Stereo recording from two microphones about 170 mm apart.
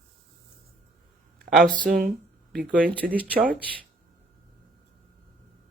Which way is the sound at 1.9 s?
65° right (ahead or behind).